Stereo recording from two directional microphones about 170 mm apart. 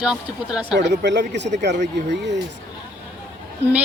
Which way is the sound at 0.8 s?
90° right.